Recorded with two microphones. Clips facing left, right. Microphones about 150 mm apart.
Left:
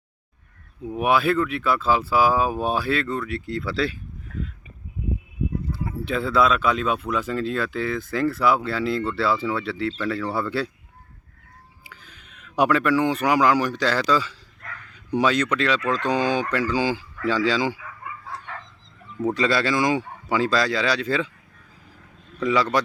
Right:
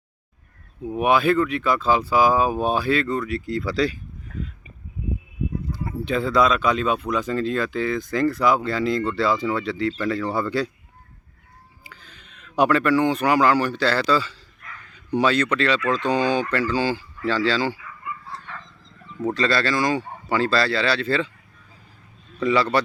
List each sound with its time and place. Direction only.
0.9 s speech: centre (ahead or behind)
5.7 s speech: 5° left (ahead or behind)
11.8 s a sound: 5° left (ahead or behind)
13.2 s speech: 5° left (ahead or behind)
19.5 s speech: 15° left (ahead or behind)